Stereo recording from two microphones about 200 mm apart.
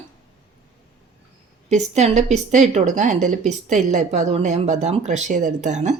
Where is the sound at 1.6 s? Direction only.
35° right (ahead or behind).